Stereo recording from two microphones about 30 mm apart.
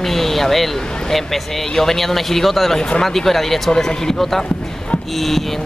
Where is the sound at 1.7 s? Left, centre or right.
Centre.